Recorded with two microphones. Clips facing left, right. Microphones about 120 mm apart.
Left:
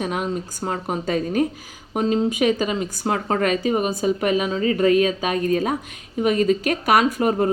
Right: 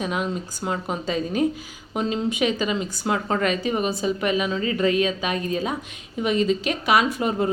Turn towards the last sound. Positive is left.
turn(degrees=45)  # may be behind; listen again after turning